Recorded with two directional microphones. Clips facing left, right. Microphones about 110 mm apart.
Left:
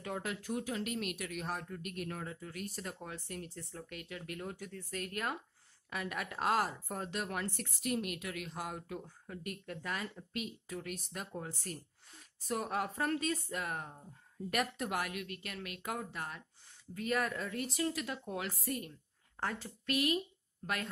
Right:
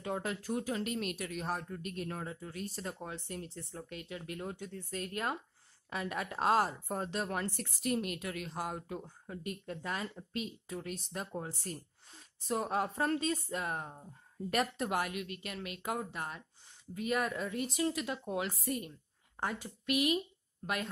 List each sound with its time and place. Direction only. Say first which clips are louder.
0.0 s a woman's voice: right 3 dB; 30° right (ahead or behind)